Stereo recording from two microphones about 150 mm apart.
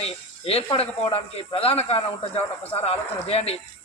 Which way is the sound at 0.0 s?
40° left (ahead or behind).